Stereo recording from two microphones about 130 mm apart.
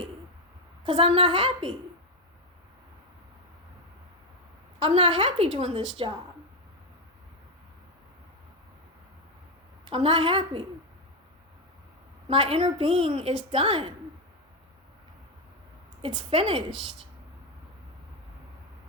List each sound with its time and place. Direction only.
0.9 s a woman's voice: 45° right (ahead or behind)
4.8 s a woman's voice: 45° right (ahead or behind)
9.9 s a woman's voice: 45° right (ahead or behind)
12.3 s a woman's voice: 45° right (ahead or behind)
16.0 s a woman's voice: 45° right (ahead or behind)